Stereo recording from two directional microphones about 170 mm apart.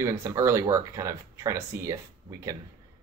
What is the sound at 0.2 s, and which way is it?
Speech, 20° right (ahead or behind).